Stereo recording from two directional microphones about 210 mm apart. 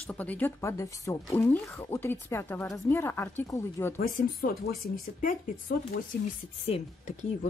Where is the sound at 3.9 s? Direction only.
40° left (ahead or behind).